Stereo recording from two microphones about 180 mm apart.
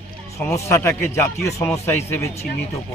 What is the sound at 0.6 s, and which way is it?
Speech, 15° left (ahead or behind).